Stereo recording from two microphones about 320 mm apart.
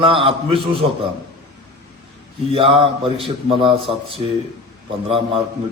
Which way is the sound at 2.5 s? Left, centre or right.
Centre.